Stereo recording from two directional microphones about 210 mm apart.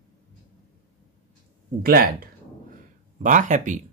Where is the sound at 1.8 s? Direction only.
45° right (ahead or behind).